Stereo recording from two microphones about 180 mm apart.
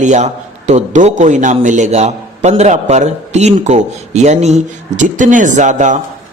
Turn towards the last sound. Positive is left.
turn(degrees=-40)  # may be behind; listen again after turning